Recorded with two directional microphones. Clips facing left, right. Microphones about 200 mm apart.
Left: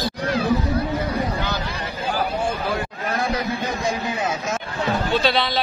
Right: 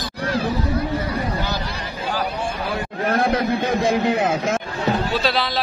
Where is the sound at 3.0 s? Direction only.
55° right (ahead or behind).